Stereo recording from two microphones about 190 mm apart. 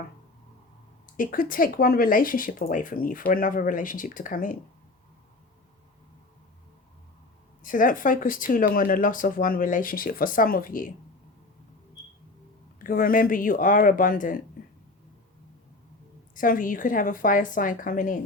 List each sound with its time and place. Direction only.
1.0 s speech: 45° left (ahead or behind)
7.6 s speech: 45° left (ahead or behind)
12.8 s speech: 50° left (ahead or behind)
16.3 s speech: 45° left (ahead or behind)